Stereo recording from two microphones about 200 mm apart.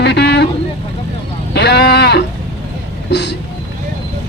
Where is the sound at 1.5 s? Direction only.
55° left (ahead or behind).